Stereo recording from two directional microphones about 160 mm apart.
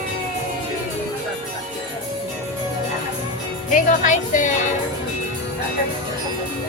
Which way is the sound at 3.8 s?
50° left (ahead or behind).